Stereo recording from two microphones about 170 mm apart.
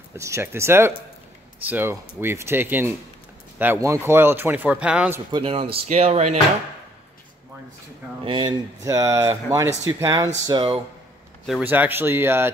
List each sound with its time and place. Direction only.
0.1 s speech: 15° right (ahead or behind)
5.3 s speech: 35° right (ahead or behind)
8.2 s speech: 25° right (ahead or behind)
10.4 s speech: 30° right (ahead or behind)
11.6 s speech: 10° right (ahead or behind)